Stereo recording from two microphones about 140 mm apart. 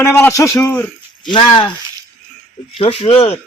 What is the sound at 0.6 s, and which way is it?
Speech, 10° left (ahead or behind).